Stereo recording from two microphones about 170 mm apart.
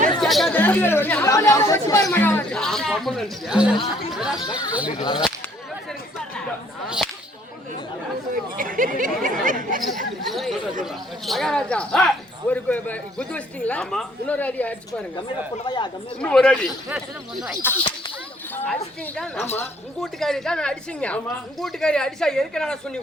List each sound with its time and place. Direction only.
0.2 s chatter: centre (ahead or behind)
0.5 s speech: 10° left (ahead or behind)
4.4 s speech: 25° left (ahead or behind)
6.8 s whip: 5° right (ahead or behind)
8.5 s speech: 55° right (ahead or behind)
10.2 s speech: centre (ahead or behind)
15.6 s speech: 25° left (ahead or behind)
16.2 s speech: 5° left (ahead or behind); by 17.7 s 10° right (ahead or behind)
18.5 s speech: 10° left (ahead or behind)